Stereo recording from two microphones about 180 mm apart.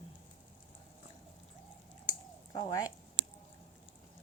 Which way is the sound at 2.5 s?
25° left (ahead or behind).